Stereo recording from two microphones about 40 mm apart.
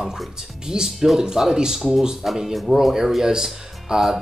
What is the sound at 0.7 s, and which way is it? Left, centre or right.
Speech, centre.